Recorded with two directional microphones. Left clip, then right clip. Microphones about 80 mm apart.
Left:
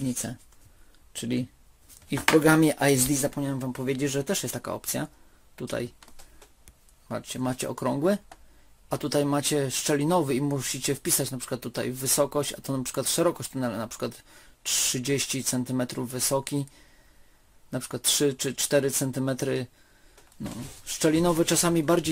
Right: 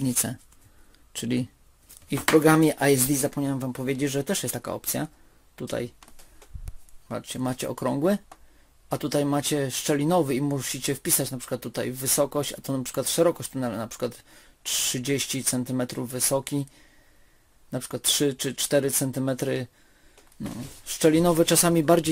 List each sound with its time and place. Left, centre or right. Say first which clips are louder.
0.0 s speech: right 4 dB; right
2.4 s speech: right 1 dB; centre
3.1 s speech: right 1 dB; right
3.3 s speech: right 2 dB; right
7.2 s speech: right 1 dB; right
20.8 s speech: right 3 dB; right